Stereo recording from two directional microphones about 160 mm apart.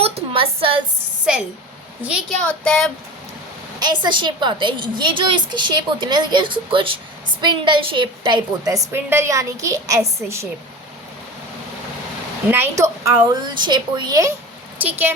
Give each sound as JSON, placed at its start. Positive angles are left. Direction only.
{"t": 0.0, "sound": "a sound", "side_deg": -35}
{"t": 1.2, "sound": "a woman's voice", "side_deg": -5}
{"t": 2.4, "sound": "speech", "side_deg": 5}
{"t": 3.8, "sound": "a woman's voice", "side_deg": -25}
{"t": 12.5, "sound": "a woman's voice", "side_deg": -15}